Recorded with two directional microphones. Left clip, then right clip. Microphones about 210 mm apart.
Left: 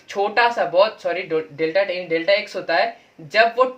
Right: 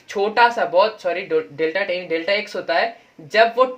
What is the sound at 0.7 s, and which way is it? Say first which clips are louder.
Speech: even; 35° right (ahead or behind).